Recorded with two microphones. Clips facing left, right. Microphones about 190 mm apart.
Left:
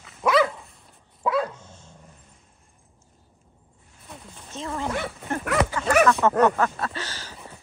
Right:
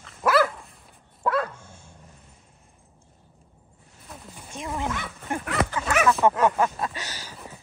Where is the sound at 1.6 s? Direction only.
10° right (ahead or behind).